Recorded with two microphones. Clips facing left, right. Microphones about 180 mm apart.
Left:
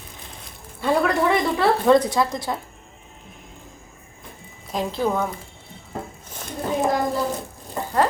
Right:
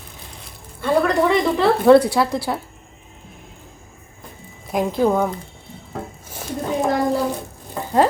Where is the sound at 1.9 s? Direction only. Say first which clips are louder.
Right 6 dB; 10° right (ahead or behind).